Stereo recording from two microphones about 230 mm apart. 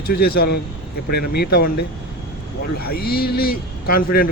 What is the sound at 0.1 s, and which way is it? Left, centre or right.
Speech, left.